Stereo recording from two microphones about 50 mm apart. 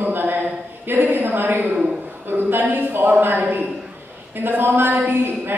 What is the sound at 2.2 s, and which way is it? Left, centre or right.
Speech, right.